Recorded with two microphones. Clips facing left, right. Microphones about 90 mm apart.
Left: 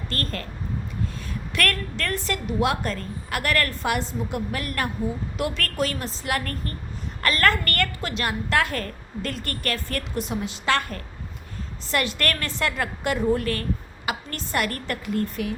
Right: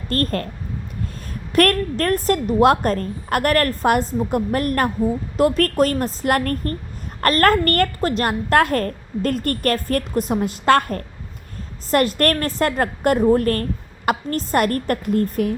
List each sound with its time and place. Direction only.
0.1 s a woman's voice: 50° right (ahead or behind)
1.5 s a woman's voice: 45° right (ahead or behind)